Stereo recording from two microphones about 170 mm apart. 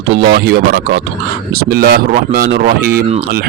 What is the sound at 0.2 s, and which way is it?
Speech, 70° right (ahead or behind).